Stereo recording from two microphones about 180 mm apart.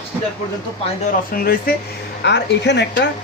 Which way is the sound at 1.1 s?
55° left (ahead or behind).